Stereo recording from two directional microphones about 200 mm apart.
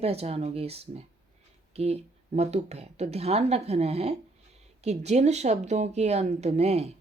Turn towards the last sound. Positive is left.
turn(degrees=-35)  # may be behind; listen again after turning